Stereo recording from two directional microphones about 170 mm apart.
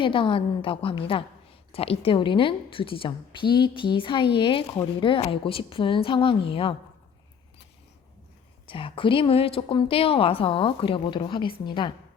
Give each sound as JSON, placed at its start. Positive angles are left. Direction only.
{"t": 0.0, "sound": "a woman's voice", "side_deg": 30}
{"t": 8.6, "sound": "a woman's voice", "side_deg": 30}